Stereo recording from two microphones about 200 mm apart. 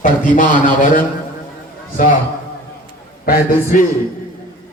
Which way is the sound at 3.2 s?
45° left (ahead or behind).